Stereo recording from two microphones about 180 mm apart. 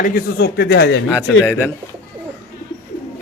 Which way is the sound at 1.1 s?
10° left (ahead or behind).